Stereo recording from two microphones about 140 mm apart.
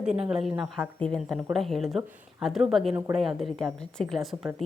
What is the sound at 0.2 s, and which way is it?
A woman's voice, 5° right (ahead or behind).